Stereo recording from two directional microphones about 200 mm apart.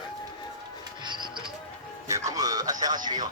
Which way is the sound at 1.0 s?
25° right (ahead or behind).